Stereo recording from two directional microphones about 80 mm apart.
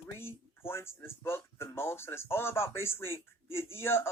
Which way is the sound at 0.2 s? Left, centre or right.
Left.